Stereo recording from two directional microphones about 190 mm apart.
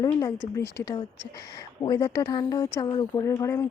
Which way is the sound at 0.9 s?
20° left (ahead or behind).